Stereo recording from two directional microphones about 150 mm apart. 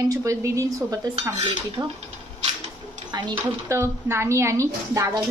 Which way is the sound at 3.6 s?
15° right (ahead or behind).